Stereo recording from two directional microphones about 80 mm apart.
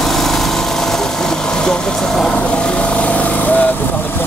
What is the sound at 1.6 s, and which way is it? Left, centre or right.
Speech, centre.